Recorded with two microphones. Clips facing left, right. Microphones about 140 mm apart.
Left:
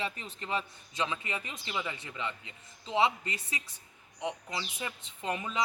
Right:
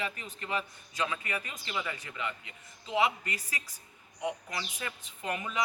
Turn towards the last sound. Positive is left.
turn(degrees=25)  # may be behind; listen again after turning